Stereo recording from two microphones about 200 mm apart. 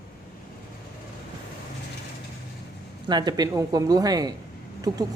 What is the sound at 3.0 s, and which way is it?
Speech, 20° right (ahead or behind).